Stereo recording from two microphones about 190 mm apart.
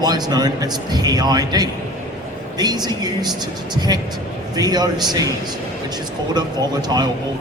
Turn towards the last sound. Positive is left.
turn(degrees=-20)  # may be behind; listen again after turning